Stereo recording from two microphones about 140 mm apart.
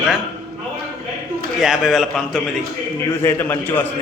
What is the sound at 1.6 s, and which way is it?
Speech, centre (ahead or behind).